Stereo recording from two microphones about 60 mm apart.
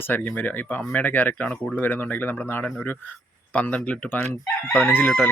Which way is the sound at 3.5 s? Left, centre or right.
Left.